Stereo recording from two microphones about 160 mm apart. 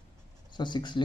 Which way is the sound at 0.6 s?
30° left (ahead or behind).